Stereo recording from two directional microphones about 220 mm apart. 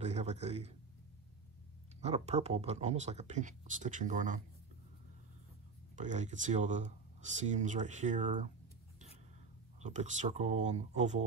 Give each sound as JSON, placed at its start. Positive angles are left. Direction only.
{"t": 0.0, "sound": "a man's voice", "side_deg": -30}
{"t": 2.0, "sound": "speech", "side_deg": -30}
{"t": 5.9, "sound": "speech", "side_deg": -35}
{"t": 9.8, "sound": "speech", "side_deg": -35}